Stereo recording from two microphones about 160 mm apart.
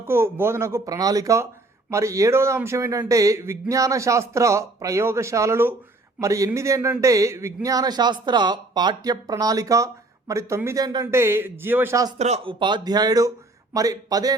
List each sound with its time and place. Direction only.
0.0 s speech: 15° right (ahead or behind)
12.1 s a man's voice: 40° right (ahead or behind)
12.5 s speech: 30° right (ahead or behind)